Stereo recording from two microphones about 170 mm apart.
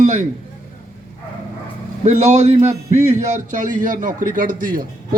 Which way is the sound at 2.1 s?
40° right (ahead or behind).